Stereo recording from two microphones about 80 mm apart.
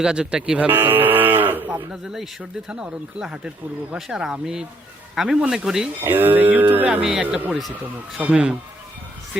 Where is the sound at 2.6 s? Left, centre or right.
Centre.